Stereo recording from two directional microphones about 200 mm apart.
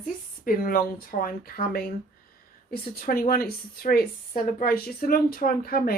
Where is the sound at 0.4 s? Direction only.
45° left (ahead or behind).